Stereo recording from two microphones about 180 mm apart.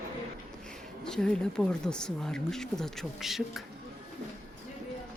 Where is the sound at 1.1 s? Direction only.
5° left (ahead or behind).